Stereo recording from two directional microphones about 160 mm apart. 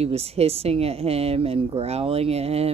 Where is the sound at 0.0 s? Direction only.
40° right (ahead or behind).